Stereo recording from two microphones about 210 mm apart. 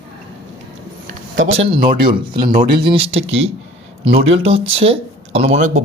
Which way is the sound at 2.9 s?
25° right (ahead or behind).